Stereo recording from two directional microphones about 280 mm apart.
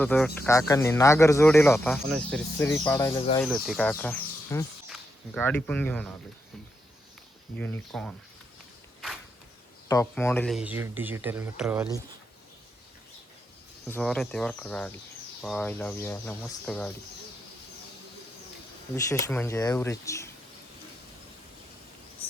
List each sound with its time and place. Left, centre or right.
0.0 s speech: centre
3.4 s speech: centre
7.6 s speech: centre
9.9 s speech: centre
13.8 s speech: centre
18.9 s speech: centre